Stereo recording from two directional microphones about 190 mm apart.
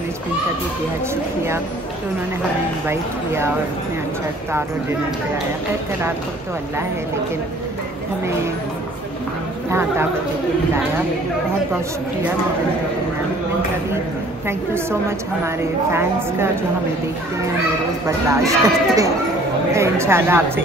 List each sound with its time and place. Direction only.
9.7 s a woman's voice: 15° right (ahead or behind)
14.7 s a woman's voice: 15° right (ahead or behind)
18.0 s a woman's voice: 15° right (ahead or behind)